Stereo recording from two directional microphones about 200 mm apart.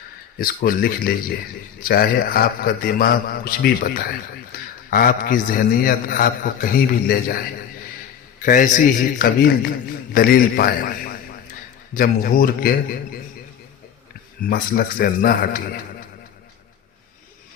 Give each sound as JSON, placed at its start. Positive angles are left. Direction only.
{"t": 0.3, "sound": "a man's voice", "side_deg": 45}
{"t": 8.4, "sound": "a man's voice", "side_deg": 40}
{"t": 14.5, "sound": "a man's voice", "side_deg": 45}